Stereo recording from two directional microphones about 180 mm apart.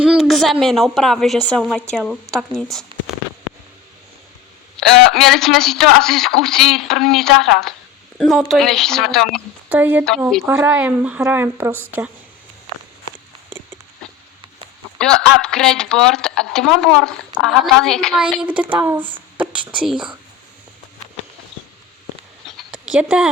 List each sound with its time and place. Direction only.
0.0 s speech: 5° right (ahead or behind)
4.8 s speech: centre (ahead or behind)
14.9 s a woman's voice: 5° left (ahead or behind)
22.4 s dog: centre (ahead or behind)